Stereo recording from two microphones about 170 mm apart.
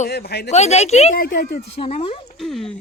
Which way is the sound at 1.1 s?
55° left (ahead or behind).